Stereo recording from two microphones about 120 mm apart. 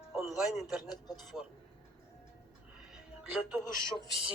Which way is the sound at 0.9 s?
35° left (ahead or behind).